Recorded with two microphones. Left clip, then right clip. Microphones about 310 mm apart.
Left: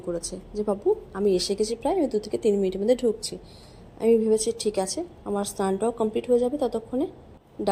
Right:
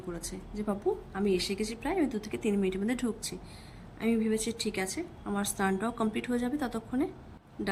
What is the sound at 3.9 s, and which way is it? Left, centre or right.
Speech, centre.